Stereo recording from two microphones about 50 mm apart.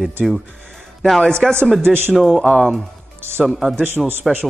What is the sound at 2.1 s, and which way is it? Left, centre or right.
Speech, centre.